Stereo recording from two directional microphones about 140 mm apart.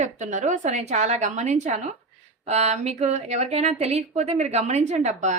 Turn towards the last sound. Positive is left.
turn(degrees=-55)  # may be behind; listen again after turning